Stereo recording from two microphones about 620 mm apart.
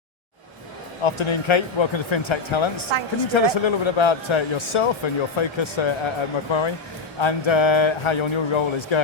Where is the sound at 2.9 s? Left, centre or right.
Right.